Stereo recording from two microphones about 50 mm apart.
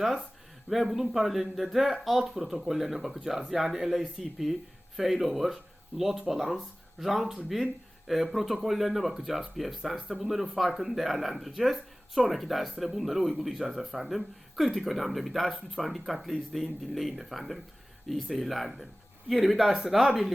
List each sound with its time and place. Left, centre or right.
0.7 s speech: centre